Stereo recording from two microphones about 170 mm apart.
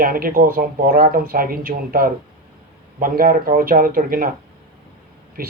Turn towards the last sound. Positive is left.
turn(degrees=-55)  # may be behind; listen again after turning